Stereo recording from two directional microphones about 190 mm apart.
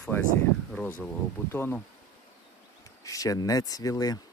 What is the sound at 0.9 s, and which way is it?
Speech, 10° left (ahead or behind).